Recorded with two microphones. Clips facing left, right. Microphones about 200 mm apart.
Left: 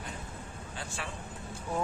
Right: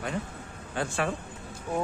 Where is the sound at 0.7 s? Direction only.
60° right (ahead or behind).